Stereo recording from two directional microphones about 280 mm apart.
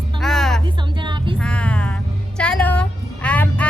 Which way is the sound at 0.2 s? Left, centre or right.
Centre.